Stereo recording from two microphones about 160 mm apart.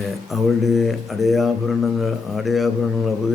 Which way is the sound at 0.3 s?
Centre (ahead or behind).